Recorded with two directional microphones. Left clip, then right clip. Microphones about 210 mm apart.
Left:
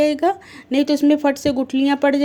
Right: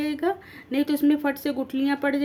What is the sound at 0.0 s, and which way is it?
Speech, 30° left (ahead or behind).